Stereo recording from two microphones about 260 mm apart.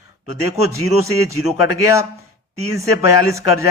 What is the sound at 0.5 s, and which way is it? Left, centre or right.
Speech, centre.